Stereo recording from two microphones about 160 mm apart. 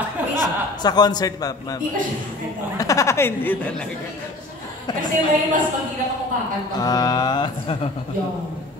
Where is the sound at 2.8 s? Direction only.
20° left (ahead or behind).